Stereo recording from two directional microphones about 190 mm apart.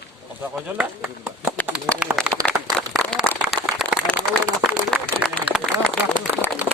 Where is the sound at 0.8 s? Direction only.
5° right (ahead or behind).